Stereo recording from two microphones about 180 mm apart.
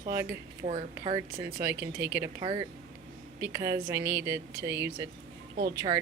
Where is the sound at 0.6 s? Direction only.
35° right (ahead or behind).